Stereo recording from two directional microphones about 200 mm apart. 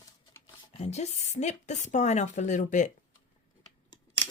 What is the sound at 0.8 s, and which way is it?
A woman's voice, 35° left (ahead or behind).